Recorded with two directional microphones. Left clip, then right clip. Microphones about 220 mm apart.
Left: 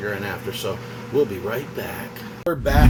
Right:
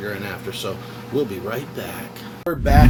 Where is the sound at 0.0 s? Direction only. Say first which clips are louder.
Left 1 dB; 25° right (ahead or behind).